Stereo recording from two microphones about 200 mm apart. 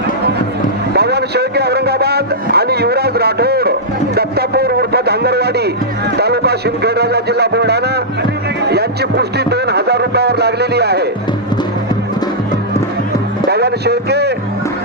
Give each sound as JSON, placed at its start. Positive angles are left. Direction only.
{"t": 0.9, "sound": "a man's voice", "side_deg": -55}
{"t": 13.5, "sound": "a man's voice", "side_deg": -55}